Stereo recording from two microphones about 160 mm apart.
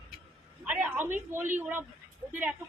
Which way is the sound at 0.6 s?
10° right (ahead or behind).